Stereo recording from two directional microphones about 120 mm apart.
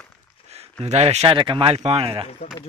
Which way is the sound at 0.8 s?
65° right (ahead or behind).